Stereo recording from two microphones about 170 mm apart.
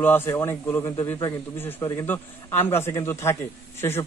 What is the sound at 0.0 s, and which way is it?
A man's voice, 15° left (ahead or behind).